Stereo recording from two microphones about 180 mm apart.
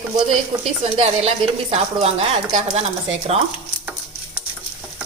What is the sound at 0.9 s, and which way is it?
Speech, 35° right (ahead or behind).